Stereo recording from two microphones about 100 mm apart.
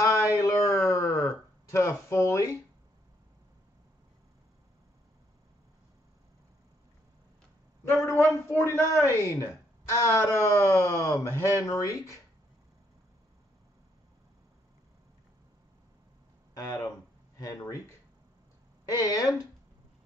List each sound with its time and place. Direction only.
0.0 s a sound: 35° left (ahead or behind)
8.5 s a woman's voice: 25° left (ahead or behind)
16.5 s a woman's voice: 40° left (ahead or behind)
18.9 s a woman's voice: 40° left (ahead or behind)